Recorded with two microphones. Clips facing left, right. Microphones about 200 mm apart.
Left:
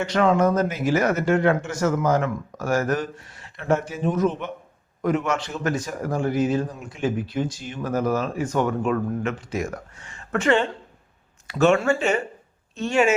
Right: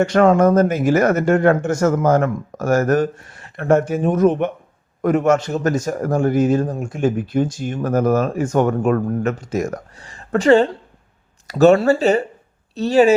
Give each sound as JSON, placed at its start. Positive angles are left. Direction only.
{"t": 0.0, "sound": "a man's voice", "side_deg": -50}